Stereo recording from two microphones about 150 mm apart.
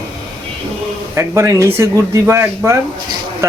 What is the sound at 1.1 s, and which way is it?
A man's voice, 20° right (ahead or behind).